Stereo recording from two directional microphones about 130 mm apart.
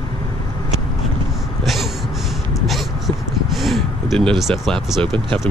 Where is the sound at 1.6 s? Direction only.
Centre (ahead or behind).